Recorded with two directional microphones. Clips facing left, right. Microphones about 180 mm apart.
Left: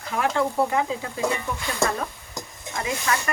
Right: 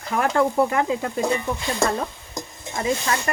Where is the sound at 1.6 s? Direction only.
25° right (ahead or behind).